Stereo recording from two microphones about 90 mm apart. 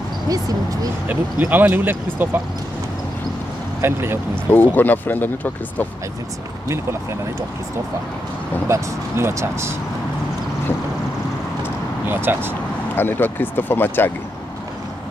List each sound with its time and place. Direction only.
1.0 s speech: 20° right (ahead or behind)
3.8 s speech: 25° right (ahead or behind)
4.5 s speech: 20° left (ahead or behind)
8.6 s speech: 30° right (ahead or behind)
11.6 s vehicle: 20° right (ahead or behind)
12.9 s speech: 25° left (ahead or behind)